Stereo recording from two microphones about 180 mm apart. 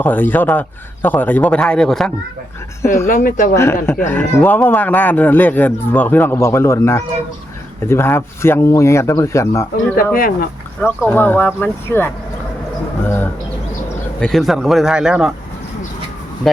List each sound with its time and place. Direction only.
0.0 s speech: 10° left (ahead or behind)
3.1 s speech: 50° left (ahead or behind)
3.5 s speech: 15° left (ahead or behind)
10.2 s speech: 55° left (ahead or behind)
10.8 s speech: 10° left (ahead or behind); by 15.3 s 5° right (ahead or behind)